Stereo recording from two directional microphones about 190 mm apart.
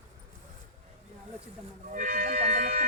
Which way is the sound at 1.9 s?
45° right (ahead or behind).